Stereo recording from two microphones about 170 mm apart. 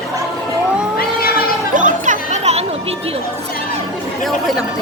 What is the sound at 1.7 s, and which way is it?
Chatter, 50° right (ahead or behind).